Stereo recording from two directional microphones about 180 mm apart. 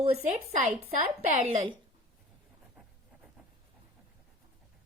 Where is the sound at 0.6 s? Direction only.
40° right (ahead or behind).